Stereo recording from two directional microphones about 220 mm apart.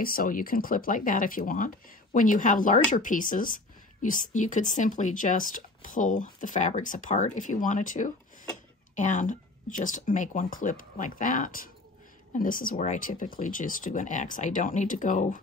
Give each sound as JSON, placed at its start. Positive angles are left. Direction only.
{"t": 0.0, "sound": "speech", "side_deg": 40}